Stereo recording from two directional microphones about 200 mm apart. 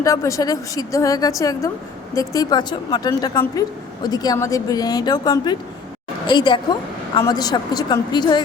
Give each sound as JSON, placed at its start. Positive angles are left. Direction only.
{"t": 0.0, "sound": "a woman's voice", "side_deg": 15}